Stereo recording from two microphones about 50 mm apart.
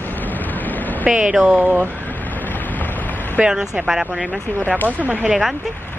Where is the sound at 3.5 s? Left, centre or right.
Centre.